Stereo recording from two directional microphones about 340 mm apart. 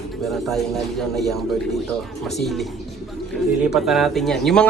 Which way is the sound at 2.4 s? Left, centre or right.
Centre.